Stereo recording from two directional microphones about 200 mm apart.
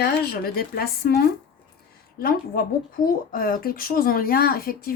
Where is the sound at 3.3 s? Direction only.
45° left (ahead or behind).